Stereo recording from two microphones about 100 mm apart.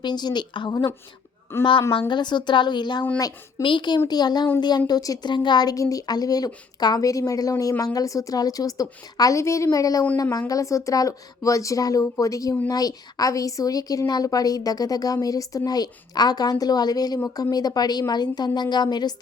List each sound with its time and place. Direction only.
0.0 s a woman's voice: 45° left (ahead or behind)
1.5 s a woman's voice: 25° left (ahead or behind)
1.9 s a woman's voice: 55° left (ahead or behind)